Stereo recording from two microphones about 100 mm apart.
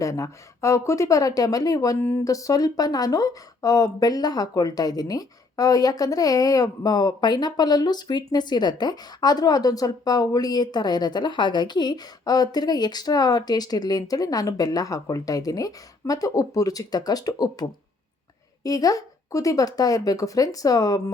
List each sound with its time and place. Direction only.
0.0 s speech: 35° left (ahead or behind)
2.0 s speech: 25° left (ahead or behind)
2.2 s speech: 35° left (ahead or behind)